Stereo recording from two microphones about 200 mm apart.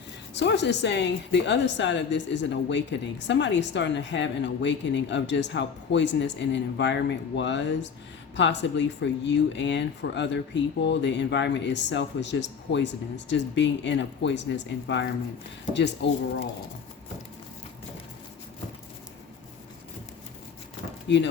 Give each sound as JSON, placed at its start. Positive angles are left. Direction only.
{"t": 0.3, "sound": "a woman's voice", "side_deg": 60}
{"t": 21.1, "sound": "a woman's voice", "side_deg": 60}